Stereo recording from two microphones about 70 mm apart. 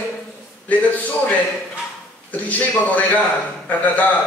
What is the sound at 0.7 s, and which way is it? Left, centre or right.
Speech, left.